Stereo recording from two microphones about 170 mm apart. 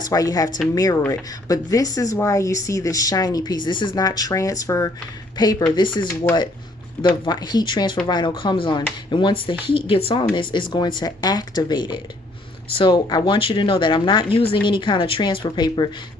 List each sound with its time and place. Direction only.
0.0 s speech: 20° left (ahead or behind)